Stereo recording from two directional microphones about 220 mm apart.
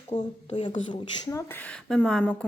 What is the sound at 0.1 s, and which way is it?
Speech, 35° left (ahead or behind).